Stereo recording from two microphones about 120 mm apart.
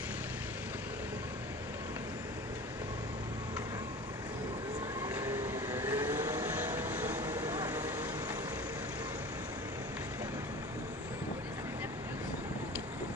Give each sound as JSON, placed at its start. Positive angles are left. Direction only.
{"t": 5.5, "sound": "vehicle", "side_deg": -20}
{"t": 7.2, "sound": "vehicle", "side_deg": -30}